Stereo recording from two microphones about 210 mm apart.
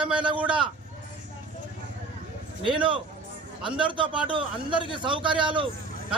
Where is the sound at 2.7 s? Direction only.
25° right (ahead or behind).